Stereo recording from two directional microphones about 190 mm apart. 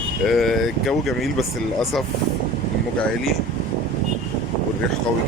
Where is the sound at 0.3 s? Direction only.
Centre (ahead or behind).